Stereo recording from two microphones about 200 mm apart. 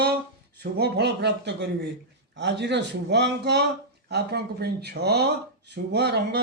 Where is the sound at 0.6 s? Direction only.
55° right (ahead or behind).